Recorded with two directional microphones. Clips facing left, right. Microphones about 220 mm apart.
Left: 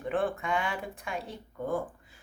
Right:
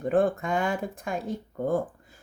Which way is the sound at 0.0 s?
40° right (ahead or behind).